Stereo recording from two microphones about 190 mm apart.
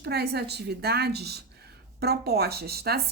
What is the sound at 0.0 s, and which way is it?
A woman's voice, 55° right (ahead or behind).